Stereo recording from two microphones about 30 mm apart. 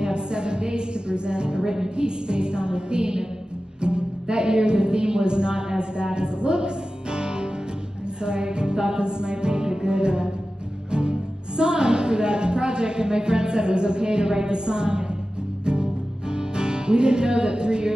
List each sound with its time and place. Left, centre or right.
0.0 s a sound: right
1.6 s music: centre
3.8 s a woman's voice: right
8.2 s music: right
10.9 s speech: right
15.6 s music: right